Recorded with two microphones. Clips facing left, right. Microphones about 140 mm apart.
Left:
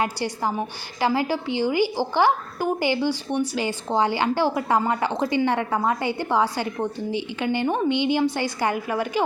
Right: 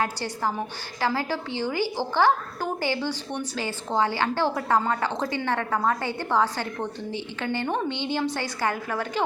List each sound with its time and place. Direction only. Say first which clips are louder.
0.0 s a woman's voice: left 2 dB; 15° left (ahead or behind)